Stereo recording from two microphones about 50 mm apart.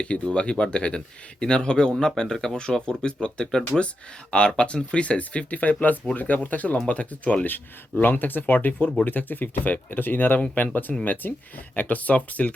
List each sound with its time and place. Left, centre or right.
0.0 s speech: left
8.0 s speech: left